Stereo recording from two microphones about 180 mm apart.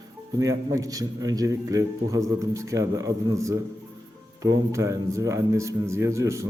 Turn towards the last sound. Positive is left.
turn(degrees=-15)  # may be behind; listen again after turning